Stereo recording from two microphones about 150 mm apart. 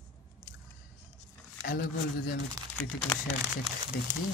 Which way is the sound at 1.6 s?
75° left (ahead or behind).